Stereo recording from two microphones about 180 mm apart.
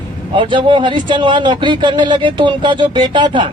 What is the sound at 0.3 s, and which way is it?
A man's voice, 25° right (ahead or behind).